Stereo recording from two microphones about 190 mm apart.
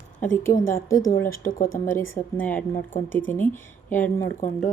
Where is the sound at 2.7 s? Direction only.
45° left (ahead or behind).